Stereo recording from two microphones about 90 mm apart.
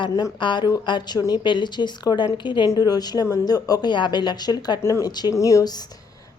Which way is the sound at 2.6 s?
45° left (ahead or behind).